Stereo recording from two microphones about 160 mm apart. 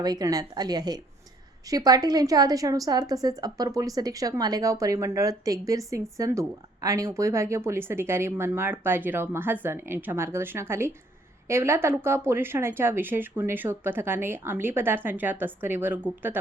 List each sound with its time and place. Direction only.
0.0 s a woman's voice: 25° right (ahead or behind)